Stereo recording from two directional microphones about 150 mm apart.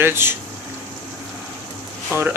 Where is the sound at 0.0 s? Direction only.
15° right (ahead or behind).